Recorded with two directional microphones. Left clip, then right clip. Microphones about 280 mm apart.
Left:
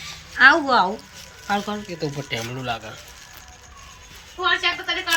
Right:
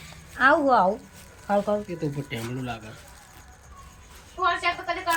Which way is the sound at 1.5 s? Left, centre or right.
Right.